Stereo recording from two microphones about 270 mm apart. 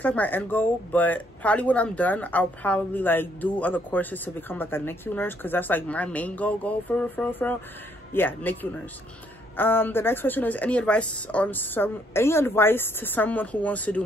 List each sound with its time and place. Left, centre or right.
0.0 s a woman's voice: centre
9.6 s a woman's voice: centre